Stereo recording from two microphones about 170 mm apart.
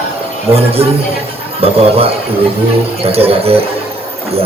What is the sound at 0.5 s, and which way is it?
A man's voice, 35° right (ahead or behind).